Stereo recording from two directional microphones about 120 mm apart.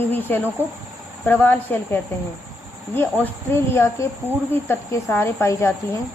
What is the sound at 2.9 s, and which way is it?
Speech, 15° left (ahead or behind).